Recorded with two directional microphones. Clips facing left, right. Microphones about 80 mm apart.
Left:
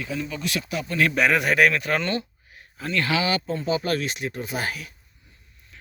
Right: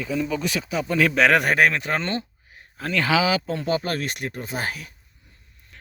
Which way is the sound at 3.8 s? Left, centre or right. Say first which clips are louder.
Left 1 dB; right.